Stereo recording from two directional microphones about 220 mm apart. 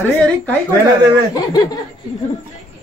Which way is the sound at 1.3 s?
20° left (ahead or behind).